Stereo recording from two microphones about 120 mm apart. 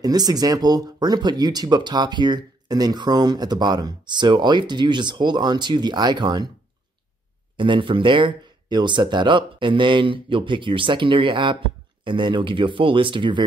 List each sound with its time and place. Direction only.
0.0 s speech: 35° right (ahead or behind)
7.5 s speech: 40° right (ahead or behind)